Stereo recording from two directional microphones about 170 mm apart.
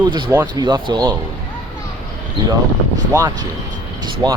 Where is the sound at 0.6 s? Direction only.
25° right (ahead or behind).